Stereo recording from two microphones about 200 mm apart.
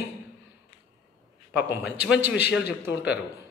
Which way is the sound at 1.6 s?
10° right (ahead or behind).